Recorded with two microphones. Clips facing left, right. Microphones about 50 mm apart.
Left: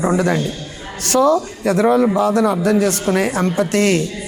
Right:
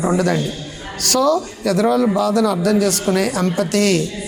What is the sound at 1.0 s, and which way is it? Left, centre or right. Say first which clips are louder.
Speech: left 2 dB; left.